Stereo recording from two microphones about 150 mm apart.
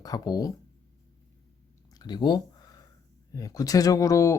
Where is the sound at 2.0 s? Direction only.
25° left (ahead or behind).